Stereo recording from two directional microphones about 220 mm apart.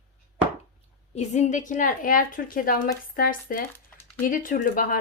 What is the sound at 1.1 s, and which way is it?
A woman's voice, 30° left (ahead or behind).